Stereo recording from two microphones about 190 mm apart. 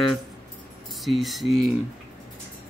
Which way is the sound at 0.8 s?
Centre (ahead or behind).